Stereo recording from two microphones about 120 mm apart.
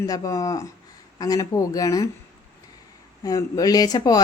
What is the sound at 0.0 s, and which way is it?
Speech, 30° left (ahead or behind).